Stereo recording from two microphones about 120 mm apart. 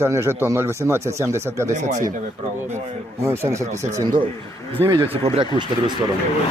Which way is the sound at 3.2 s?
20° right (ahead or behind).